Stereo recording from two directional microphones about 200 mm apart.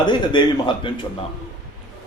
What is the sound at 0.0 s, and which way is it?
Speech, 25° left (ahead or behind).